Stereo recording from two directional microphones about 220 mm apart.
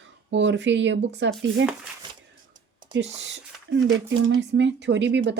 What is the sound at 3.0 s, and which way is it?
Speech, 55° right (ahead or behind).